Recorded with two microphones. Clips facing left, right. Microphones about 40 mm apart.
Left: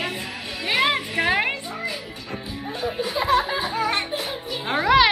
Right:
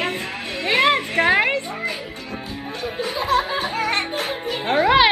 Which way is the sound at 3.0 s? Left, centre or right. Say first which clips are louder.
Right 1 dB; right.